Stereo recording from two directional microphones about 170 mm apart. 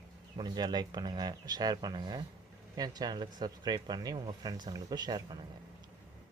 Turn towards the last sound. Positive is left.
turn(degrees=-25)  # may be behind; listen again after turning